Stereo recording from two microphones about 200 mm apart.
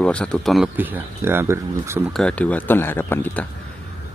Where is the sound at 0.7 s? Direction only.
10° right (ahead or behind).